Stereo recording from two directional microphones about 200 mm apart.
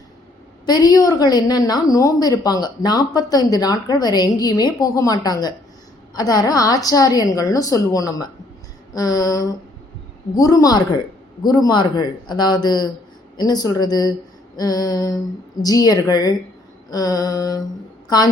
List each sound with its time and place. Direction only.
0.6 s a woman's voice: 20° left (ahead or behind)